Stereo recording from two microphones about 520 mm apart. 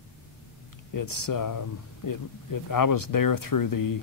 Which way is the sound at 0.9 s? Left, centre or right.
Left.